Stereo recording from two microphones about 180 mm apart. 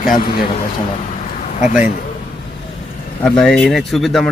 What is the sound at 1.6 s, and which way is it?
Speech, 40° left (ahead or behind).